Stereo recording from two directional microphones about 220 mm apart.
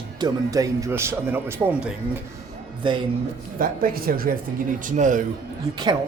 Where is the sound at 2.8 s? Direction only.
20° right (ahead or behind).